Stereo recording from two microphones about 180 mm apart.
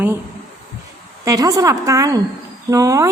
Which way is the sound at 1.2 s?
20° right (ahead or behind).